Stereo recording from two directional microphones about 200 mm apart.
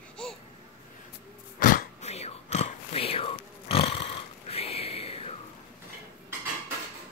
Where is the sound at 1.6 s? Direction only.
45° left (ahead or behind).